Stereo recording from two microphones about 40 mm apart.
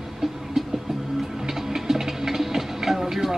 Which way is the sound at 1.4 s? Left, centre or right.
Centre.